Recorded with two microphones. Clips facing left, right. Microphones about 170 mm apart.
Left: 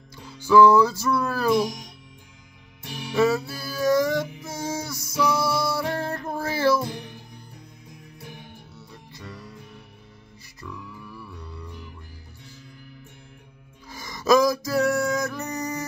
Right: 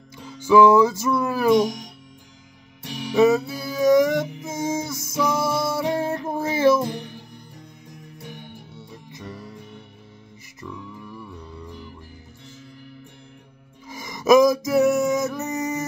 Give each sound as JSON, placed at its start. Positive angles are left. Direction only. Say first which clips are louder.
{"t": 0.4, "sound": "music", "louder": "right 1 dB", "side_deg": -20}
{"t": 3.2, "sound": "music", "louder": "right 4 dB", "side_deg": -20}
{"t": 8.7, "sound": "music", "louder": "right 4 dB", "side_deg": -20}
{"t": 11.0, "sound": "mantra", "louder": "right 3 dB", "side_deg": -15}
{"t": 13.8, "sound": "music", "louder": "right 3 dB", "side_deg": -20}